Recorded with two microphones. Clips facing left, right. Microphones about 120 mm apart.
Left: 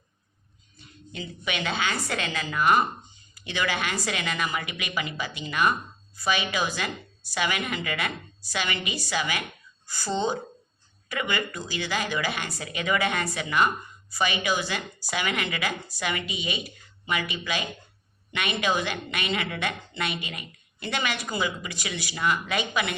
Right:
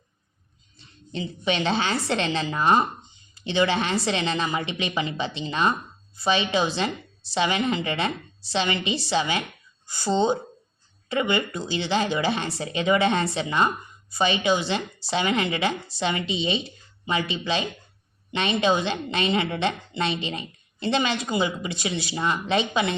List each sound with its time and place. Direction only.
0.8 s a woman's voice: 30° right (ahead or behind)